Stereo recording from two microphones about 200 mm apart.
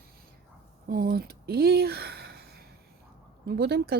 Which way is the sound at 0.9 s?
45° right (ahead or behind).